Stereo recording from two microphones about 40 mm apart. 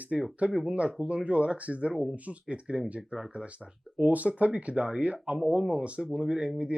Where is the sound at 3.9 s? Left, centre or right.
Right.